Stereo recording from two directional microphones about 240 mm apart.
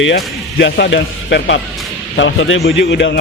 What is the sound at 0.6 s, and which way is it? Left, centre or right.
A man's voice, left.